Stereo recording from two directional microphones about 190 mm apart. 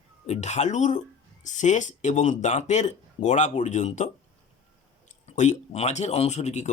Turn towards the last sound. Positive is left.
turn(degrees=35)  # may be behind; listen again after turning